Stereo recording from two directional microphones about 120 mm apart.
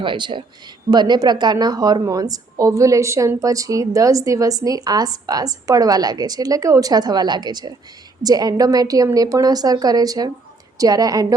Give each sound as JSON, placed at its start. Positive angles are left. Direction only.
{"t": 0.0, "sound": "a woman's voice", "side_deg": -45}